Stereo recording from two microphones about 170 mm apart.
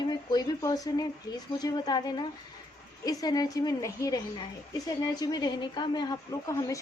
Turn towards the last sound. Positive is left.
turn(degrees=20)  # may be behind; listen again after turning